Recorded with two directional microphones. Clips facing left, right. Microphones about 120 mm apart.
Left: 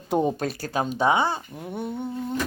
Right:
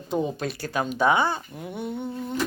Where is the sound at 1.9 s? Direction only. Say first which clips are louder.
Left 1 dB; 10° left (ahead or behind).